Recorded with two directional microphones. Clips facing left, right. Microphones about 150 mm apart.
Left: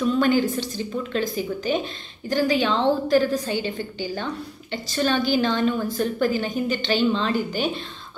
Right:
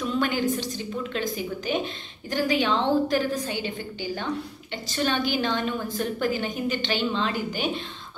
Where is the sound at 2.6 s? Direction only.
10° right (ahead or behind).